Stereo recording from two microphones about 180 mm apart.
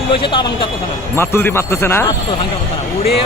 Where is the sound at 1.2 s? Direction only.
15° left (ahead or behind).